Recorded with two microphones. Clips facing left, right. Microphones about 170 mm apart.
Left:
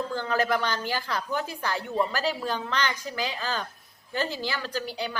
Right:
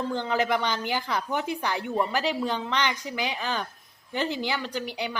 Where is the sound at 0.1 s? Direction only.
20° right (ahead or behind).